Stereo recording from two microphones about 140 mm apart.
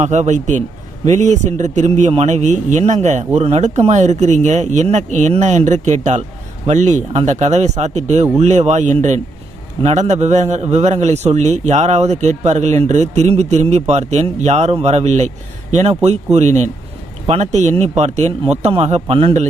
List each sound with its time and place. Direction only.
0.0 s a man's voice: 55° right (ahead or behind)